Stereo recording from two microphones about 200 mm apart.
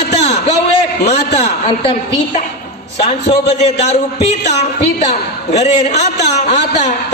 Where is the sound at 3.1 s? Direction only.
30° left (ahead or behind).